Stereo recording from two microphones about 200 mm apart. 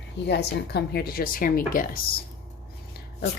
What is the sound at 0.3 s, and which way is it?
Speech, 55° left (ahead or behind).